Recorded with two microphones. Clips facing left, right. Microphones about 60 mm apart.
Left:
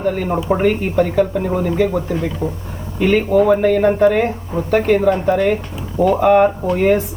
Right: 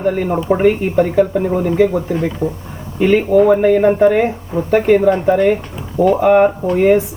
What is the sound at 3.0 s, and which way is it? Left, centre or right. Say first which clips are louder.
Speech: right 3 dB; centre.